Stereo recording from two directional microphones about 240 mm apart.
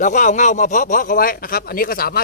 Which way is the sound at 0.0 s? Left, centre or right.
Left.